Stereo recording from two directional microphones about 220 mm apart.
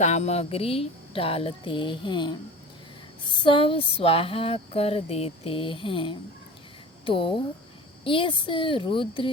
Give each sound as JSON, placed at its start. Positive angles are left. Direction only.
{"t": 0.0, "sound": "speech", "side_deg": 30}